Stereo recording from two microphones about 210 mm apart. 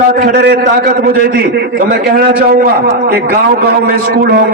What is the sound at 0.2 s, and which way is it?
Speech, 50° right (ahead or behind).